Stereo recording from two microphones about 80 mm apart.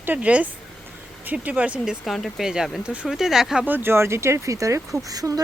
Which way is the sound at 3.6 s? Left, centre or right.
Right.